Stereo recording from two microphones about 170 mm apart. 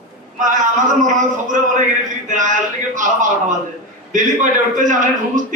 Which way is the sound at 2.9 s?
50° right (ahead or behind).